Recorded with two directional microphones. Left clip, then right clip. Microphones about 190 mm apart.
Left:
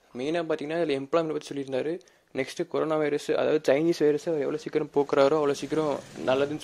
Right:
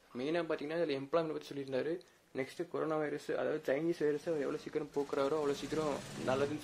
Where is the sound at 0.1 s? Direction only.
35° left (ahead or behind).